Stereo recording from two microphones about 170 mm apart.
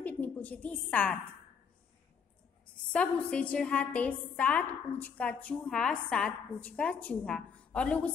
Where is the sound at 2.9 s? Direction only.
5° left (ahead or behind).